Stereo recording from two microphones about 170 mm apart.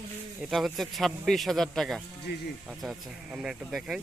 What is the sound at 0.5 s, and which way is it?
Speech, centre (ahead or behind).